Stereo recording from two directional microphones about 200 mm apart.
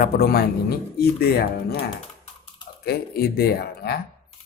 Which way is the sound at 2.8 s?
50° left (ahead or behind).